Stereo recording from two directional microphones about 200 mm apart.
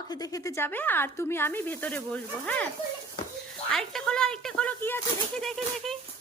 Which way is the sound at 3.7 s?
5° left (ahead or behind).